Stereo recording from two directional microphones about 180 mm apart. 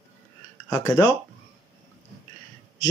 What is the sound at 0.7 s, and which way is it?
Speech, 15° left (ahead or behind).